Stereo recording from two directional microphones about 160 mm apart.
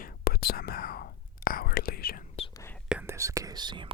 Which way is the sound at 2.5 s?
15° left (ahead or behind).